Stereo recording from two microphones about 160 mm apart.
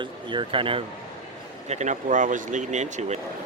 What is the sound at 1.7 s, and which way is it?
Speech, 45° right (ahead or behind).